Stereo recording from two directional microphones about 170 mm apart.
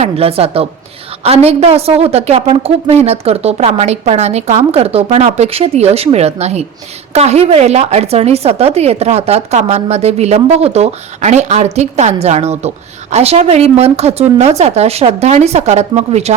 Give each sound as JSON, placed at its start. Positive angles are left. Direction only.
{"t": 0.0, "sound": "a woman's voice", "side_deg": -35}